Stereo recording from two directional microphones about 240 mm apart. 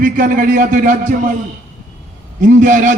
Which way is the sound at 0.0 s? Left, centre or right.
Right.